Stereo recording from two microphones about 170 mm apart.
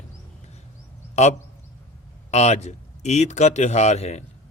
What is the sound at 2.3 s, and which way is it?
Speech, 40° left (ahead or behind).